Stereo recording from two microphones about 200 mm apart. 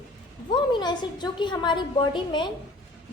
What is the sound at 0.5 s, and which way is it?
A woman's voice, 20° left (ahead or behind).